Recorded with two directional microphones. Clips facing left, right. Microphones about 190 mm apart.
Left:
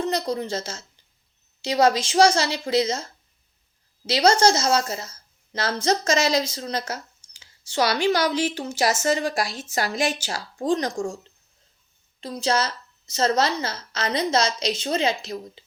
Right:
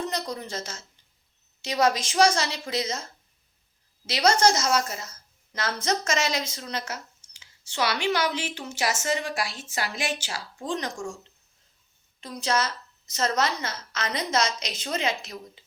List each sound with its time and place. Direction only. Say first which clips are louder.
0.0 s a woman's voice: left 6 dB; 30° left (ahead or behind)
12.2 s speech: left 3 dB; 30° left (ahead or behind)